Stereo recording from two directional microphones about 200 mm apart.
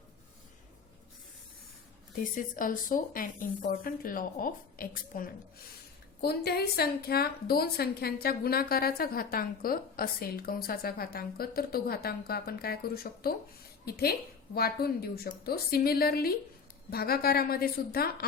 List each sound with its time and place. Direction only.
2.3 s a woman's voice: 45° left (ahead or behind)